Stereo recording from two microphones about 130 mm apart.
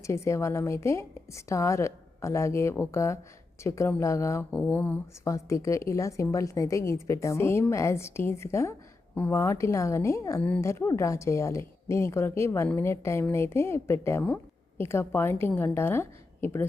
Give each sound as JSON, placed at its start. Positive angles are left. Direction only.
{"t": 0.0, "sound": "a woman's voice", "side_deg": 20}
{"t": 4.5, "sound": "a woman's voice", "side_deg": 10}